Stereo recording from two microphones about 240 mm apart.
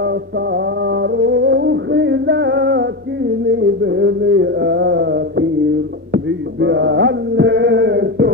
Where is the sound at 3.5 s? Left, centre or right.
Right.